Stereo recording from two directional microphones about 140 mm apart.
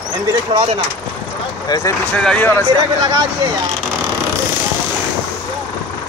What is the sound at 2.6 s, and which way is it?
Speech, 30° right (ahead or behind).